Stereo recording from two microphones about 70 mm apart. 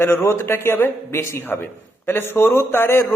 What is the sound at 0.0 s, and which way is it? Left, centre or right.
Speech, left.